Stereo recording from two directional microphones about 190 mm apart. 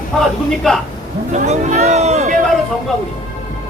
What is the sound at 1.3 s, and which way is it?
Speech, 35° right (ahead or behind).